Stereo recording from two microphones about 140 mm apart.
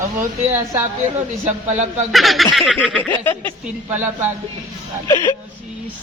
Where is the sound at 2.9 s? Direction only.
15° left (ahead or behind).